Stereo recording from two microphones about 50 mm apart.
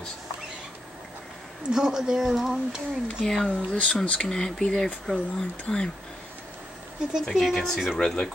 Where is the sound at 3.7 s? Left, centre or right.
Centre.